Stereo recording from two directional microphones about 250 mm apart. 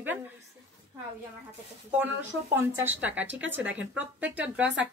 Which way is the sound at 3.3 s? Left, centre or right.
Right.